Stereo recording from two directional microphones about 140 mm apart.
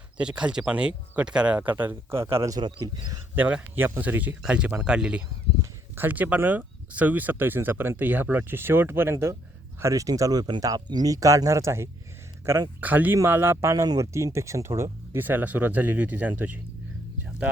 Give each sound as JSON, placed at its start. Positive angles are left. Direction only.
{"t": 0.2, "sound": "speech", "side_deg": -5}
{"t": 3.3, "sound": "speech", "side_deg": -10}
{"t": 12.8, "sound": "speech", "side_deg": -10}